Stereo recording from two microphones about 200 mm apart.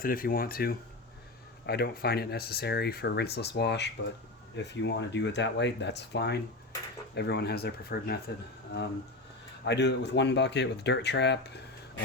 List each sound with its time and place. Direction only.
0.0 s speech: 45° left (ahead or behind)
9.6 s speech: 60° left (ahead or behind)